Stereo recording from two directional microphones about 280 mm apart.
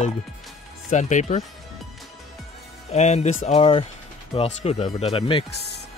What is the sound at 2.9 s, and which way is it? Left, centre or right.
Speech, left.